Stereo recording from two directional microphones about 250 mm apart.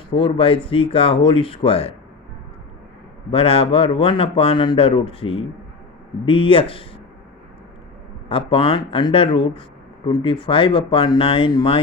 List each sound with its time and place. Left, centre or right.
0.1 s speech: left
3.3 s speech: left
8.3 s speech: left